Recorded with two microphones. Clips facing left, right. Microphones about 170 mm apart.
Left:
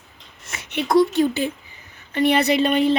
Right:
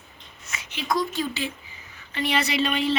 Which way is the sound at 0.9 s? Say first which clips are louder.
Left 10 dB; 65° left (ahead or behind).